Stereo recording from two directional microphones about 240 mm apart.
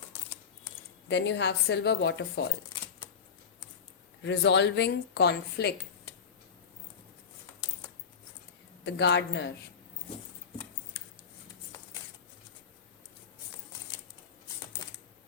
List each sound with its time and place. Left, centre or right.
1.0 s speech: left
4.2 s speech: left
8.8 s speech: left
14.8 s typing: centre